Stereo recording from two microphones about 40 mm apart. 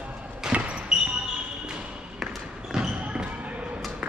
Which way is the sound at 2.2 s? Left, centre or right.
Centre.